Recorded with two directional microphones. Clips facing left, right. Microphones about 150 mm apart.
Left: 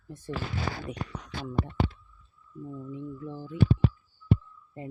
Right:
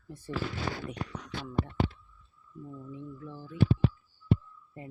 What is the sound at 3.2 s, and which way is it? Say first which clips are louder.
Speech: left 5 dB; 20° left (ahead or behind).